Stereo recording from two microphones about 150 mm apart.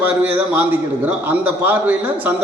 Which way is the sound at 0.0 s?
10° right (ahead or behind).